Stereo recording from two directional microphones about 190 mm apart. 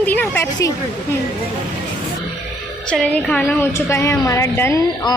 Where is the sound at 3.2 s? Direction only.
10° left (ahead or behind).